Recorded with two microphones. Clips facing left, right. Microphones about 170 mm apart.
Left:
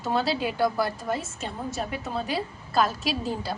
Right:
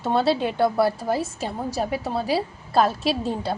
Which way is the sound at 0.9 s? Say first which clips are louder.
Right 5 dB; 35° right (ahead or behind).